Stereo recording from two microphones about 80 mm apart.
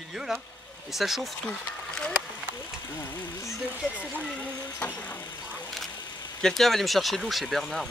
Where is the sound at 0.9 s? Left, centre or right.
Centre.